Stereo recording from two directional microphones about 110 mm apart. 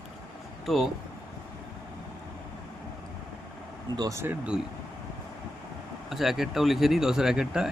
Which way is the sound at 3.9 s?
30° right (ahead or behind).